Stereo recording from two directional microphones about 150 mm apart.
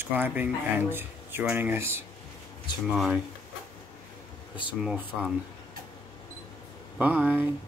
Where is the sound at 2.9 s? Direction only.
5° right (ahead or behind).